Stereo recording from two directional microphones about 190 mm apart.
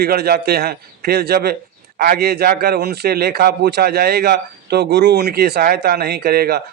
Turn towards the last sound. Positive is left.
turn(degrees=-55)  # may be behind; listen again after turning